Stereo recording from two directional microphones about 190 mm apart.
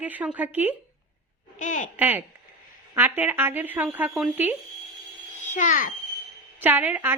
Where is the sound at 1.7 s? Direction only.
40° left (ahead or behind).